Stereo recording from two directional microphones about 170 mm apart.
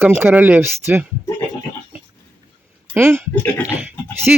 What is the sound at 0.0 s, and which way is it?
Speech, 10° right (ahead or behind).